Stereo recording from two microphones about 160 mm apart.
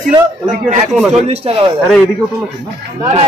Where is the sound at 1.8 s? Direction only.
Centre (ahead or behind).